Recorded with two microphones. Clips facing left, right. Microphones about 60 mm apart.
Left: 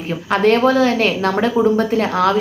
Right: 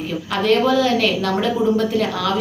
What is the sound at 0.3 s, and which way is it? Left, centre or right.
A woman's voice, left.